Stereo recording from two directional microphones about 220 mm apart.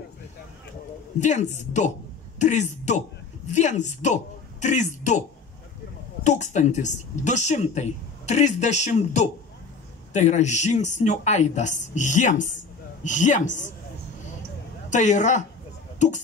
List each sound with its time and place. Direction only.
1.2 s a woman's voice: 30° left (ahead or behind)
6.2 s speech: 30° left (ahead or behind)
14.9 s speech: 35° left (ahead or behind)